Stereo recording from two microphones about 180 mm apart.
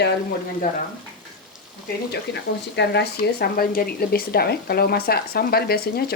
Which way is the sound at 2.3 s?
70° left (ahead or behind).